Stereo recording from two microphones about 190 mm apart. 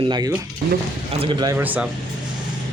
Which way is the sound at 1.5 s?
10° right (ahead or behind).